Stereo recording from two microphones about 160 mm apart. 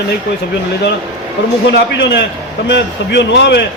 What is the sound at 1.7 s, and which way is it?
A man's voice, 90° left.